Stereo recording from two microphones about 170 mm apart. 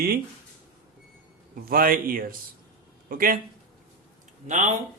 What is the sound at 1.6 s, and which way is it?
Speech, 60° right (ahead or behind).